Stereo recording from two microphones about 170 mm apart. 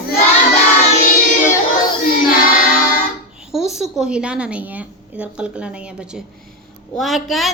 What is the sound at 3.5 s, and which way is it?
A woman's voice, 5° right (ahead or behind).